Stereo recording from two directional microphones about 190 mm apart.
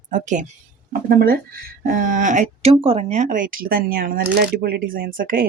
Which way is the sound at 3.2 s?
45° right (ahead or behind).